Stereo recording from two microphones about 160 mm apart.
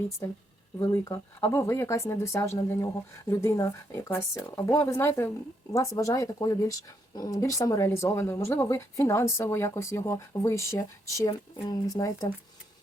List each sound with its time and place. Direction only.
0.2 s speech: 15° left (ahead or behind)